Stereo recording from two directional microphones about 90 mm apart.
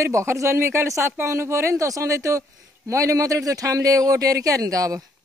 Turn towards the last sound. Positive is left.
turn(degrees=-40)  # may be behind; listen again after turning